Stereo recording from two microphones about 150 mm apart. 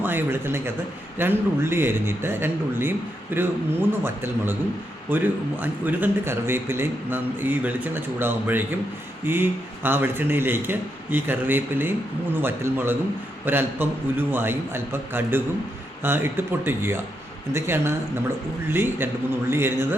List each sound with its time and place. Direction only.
0.0 s a man's voice: 15° right (ahead or behind)